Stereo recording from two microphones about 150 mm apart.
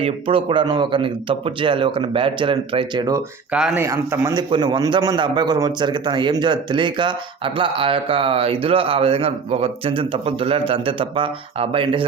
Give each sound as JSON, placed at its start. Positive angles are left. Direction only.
{"t": 0.0, "sound": "a man's voice", "side_deg": -35}
{"t": 3.5, "sound": "speech", "side_deg": -5}
{"t": 3.8, "sound": "speech", "side_deg": -20}
{"t": 4.4, "sound": "a man's voice", "side_deg": -30}